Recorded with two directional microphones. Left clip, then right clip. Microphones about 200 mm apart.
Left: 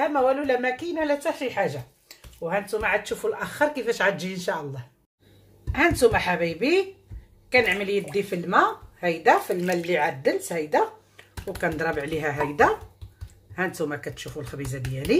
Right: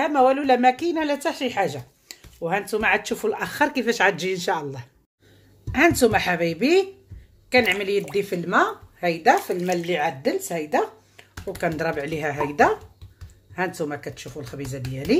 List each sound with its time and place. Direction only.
0.0 s a woman's voice: 45° right (ahead or behind); by 14.8 s 15° right (ahead or behind)